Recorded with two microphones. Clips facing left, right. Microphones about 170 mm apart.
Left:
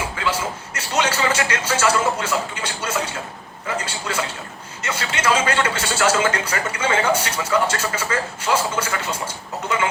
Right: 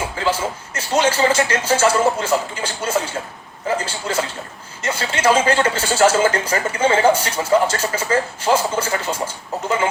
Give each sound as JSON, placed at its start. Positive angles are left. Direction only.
{"t": 0.2, "sound": "a man's voice", "side_deg": -30}